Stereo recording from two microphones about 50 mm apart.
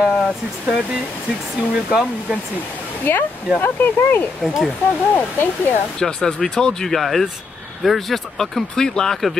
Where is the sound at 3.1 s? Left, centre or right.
Left.